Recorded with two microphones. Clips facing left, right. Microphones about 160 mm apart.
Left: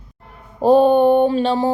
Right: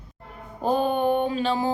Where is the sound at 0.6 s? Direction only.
30° left (ahead or behind).